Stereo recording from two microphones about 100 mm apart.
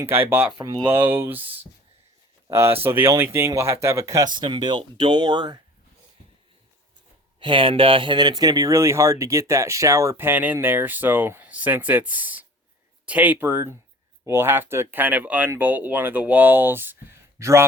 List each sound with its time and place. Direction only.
0.0 s speech: 20° right (ahead or behind)
0.6 s speech: 45° right (ahead or behind)
0.9 s speech: 20° right (ahead or behind)
4.3 s speech: 55° right (ahead or behind)
7.3 s speech: 60° right (ahead or behind); by 17.7 s 30° right (ahead or behind)